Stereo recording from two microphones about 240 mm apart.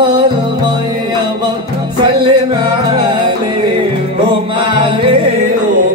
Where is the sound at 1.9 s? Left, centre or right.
Centre.